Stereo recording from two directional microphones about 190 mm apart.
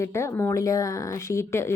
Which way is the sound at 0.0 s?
15° left (ahead or behind).